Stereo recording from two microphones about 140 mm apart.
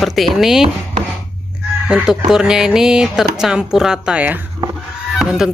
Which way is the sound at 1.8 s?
5° right (ahead or behind).